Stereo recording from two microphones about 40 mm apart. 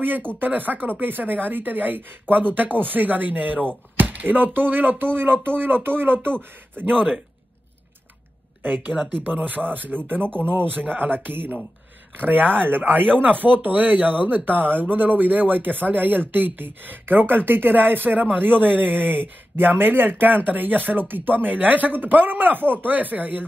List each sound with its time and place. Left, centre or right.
0.0 s speech: right
8.6 s speech: right
12.5 s speech: right